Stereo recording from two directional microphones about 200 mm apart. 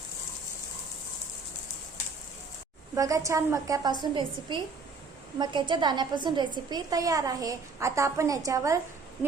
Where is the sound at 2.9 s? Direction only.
15° right (ahead or behind).